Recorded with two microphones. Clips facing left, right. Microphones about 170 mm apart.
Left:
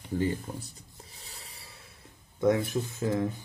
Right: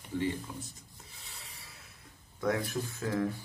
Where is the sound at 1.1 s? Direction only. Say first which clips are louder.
Left 1 dB; 35° left (ahead or behind).